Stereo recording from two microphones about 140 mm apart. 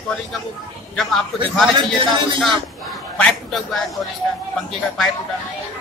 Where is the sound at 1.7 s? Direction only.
35° right (ahead or behind).